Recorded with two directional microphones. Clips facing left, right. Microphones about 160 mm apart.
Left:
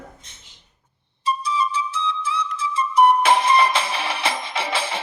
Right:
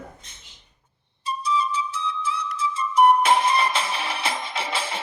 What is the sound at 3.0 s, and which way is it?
Music, 90° left.